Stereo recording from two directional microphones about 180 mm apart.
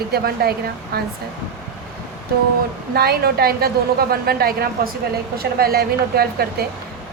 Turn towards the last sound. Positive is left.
turn(degrees=-60)  # may be behind; listen again after turning